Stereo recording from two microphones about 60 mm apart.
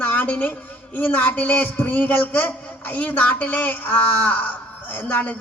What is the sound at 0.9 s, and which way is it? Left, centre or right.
A man's voice, left.